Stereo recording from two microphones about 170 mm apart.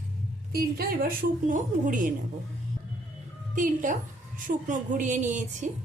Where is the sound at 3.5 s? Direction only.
50° right (ahead or behind).